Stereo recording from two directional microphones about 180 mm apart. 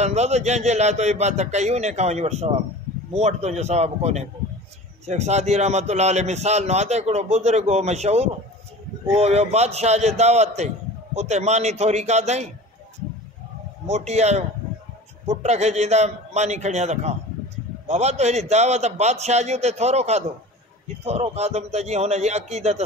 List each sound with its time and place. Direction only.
0.0 s a man's voice: 40° right (ahead or behind)
13.8 s a man's voice: 40° right (ahead or behind)